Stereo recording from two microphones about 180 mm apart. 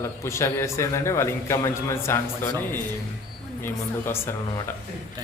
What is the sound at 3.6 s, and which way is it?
A man's voice, 10° left (ahead or behind).